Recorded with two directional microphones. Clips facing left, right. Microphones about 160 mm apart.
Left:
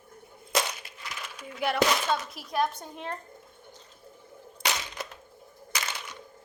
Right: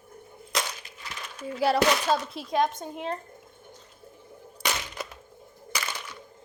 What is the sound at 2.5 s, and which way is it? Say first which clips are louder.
Speech: right 3 dB; 20° right (ahead or behind).